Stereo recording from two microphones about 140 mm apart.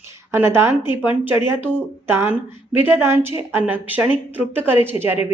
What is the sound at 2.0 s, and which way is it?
Speech, 15° right (ahead or behind).